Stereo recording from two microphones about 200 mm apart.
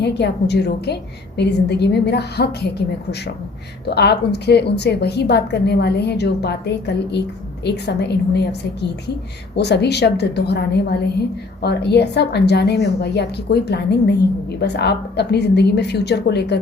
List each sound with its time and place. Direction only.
0.0 s a woman's voice: 55° left (ahead or behind)